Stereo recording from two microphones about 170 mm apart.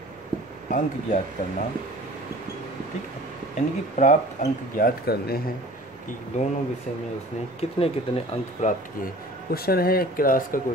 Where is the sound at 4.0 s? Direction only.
45° left (ahead or behind).